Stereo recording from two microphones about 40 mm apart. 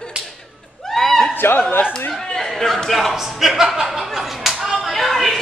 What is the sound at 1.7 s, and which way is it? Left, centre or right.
Chatter, left.